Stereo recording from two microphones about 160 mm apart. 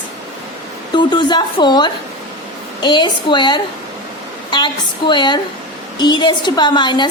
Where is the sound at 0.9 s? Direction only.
30° left (ahead or behind).